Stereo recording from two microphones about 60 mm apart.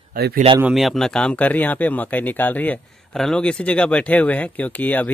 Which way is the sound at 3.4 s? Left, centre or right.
Centre.